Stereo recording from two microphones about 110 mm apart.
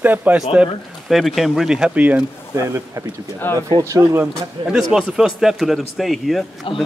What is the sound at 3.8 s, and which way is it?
Speech, 30° right (ahead or behind).